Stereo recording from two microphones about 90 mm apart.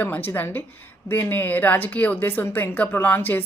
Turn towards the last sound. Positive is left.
turn(degrees=20)  # may be behind; listen again after turning